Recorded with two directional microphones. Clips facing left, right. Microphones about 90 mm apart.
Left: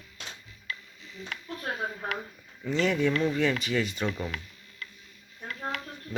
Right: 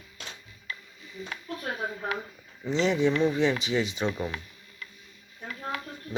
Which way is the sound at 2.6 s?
20° right (ahead or behind).